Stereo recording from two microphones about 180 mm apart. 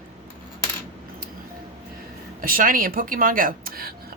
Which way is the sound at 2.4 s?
50° right (ahead or behind).